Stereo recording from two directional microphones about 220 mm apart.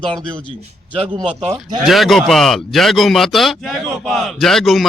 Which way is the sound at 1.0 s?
20° right (ahead or behind).